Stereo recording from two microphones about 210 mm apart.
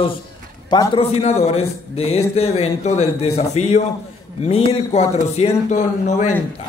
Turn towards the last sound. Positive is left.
turn(degrees=35)  # may be behind; listen again after turning